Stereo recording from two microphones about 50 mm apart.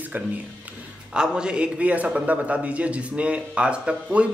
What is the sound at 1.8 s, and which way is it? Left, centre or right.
A man's voice, right.